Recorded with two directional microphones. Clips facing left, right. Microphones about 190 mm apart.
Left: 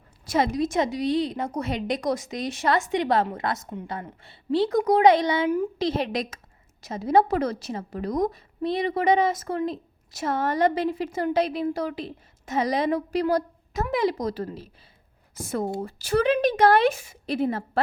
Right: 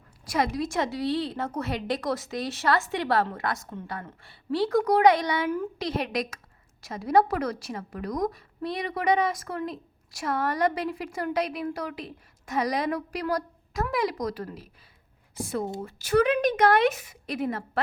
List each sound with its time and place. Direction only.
0.3 s a woman's voice: 25° left (ahead or behind)
15.4 s a woman's voice: 40° left (ahead or behind)